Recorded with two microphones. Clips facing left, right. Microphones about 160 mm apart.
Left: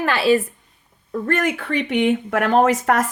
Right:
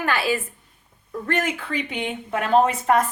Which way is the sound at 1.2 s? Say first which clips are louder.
Left 4 dB; 50° left (ahead or behind).